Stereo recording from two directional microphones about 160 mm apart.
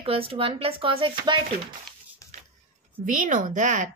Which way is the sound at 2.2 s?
20° left (ahead or behind).